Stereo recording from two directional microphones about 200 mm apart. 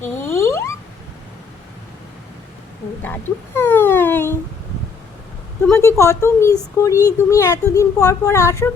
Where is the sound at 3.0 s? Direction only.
10° left (ahead or behind).